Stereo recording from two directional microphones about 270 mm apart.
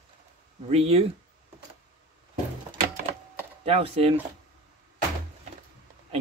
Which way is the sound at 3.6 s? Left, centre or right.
Right.